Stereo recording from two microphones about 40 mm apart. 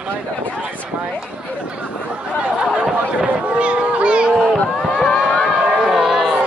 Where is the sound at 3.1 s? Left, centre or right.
Right.